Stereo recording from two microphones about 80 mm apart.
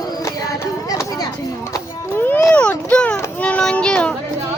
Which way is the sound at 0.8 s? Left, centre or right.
Left.